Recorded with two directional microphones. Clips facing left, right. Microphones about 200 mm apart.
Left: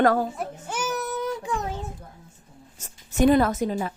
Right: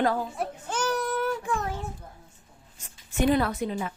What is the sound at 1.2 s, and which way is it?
Child singing, 20° left (ahead or behind).